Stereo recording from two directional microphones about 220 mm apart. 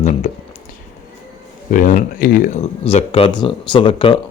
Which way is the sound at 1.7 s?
35° left (ahead or behind).